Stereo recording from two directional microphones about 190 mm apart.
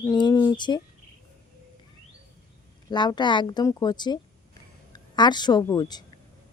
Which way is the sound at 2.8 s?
20° left (ahead or behind).